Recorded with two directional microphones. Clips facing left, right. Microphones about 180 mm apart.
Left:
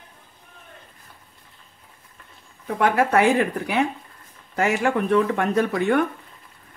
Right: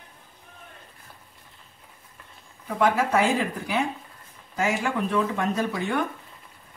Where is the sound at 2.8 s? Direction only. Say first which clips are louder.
Left 3 dB; 60° left (ahead or behind).